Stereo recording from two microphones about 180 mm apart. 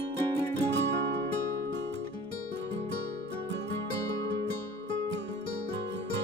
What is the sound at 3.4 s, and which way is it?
Music, 75° right (ahead or behind).